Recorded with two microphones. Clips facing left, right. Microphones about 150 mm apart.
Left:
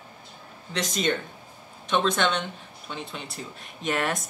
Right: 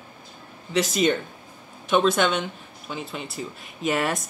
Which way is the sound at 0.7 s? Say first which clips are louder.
Right 5 dB; 5° right (ahead or behind).